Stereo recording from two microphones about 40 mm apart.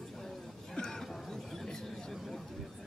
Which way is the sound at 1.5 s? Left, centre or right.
Centre.